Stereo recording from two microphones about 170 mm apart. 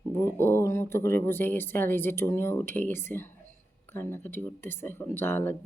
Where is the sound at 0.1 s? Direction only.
15° left (ahead or behind).